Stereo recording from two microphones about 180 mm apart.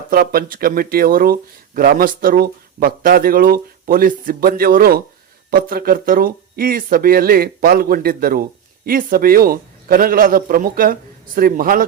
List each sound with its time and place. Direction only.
0.1 s speech: 55° right (ahead or behind)